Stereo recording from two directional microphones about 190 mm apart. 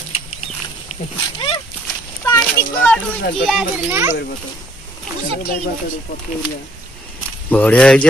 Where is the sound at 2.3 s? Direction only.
10° left (ahead or behind).